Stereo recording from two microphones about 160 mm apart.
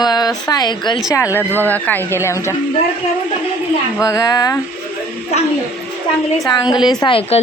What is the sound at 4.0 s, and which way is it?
Speech, 20° left (ahead or behind).